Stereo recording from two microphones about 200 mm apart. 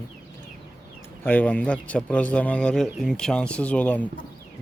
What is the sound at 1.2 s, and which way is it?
A man's voice, 10° left (ahead or behind).